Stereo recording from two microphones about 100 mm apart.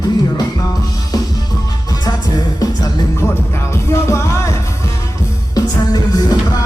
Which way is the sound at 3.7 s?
30° left (ahead or behind).